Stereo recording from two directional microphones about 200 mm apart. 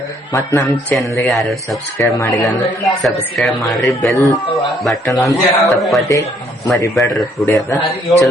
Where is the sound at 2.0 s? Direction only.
15° left (ahead or behind).